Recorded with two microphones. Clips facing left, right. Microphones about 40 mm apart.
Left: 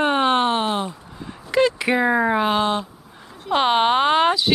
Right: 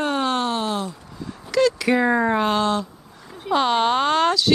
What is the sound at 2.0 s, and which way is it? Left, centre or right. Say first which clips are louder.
Speech: left 2 dB; centre.